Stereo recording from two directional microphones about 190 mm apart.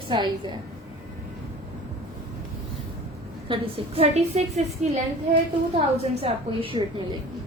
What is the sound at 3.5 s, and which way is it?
Speech, 30° right (ahead or behind).